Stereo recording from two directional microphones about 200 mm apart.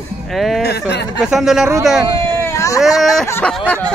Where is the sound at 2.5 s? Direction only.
15° left (ahead or behind).